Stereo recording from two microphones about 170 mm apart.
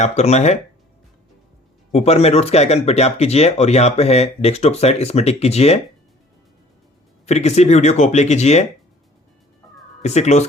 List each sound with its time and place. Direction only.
0.0 s speech: 40° left (ahead or behind)
1.9 s speech: 40° left (ahead or behind)
7.3 s speech: 40° left (ahead or behind)
10.0 s speech: 40° left (ahead or behind)